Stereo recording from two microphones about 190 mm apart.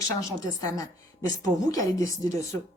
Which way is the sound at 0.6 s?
15° left (ahead or behind).